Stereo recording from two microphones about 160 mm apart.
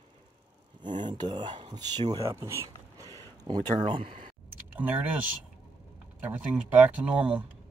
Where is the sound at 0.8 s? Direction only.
30° right (ahead or behind).